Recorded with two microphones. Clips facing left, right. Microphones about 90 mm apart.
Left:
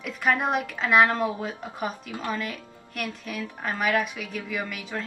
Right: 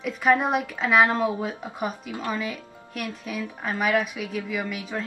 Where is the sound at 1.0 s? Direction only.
15° right (ahead or behind).